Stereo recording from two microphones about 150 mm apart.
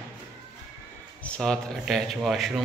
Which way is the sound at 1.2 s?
5° left (ahead or behind).